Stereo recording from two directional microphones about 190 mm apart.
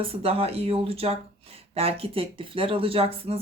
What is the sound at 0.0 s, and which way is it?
Speech, 30° right (ahead or behind).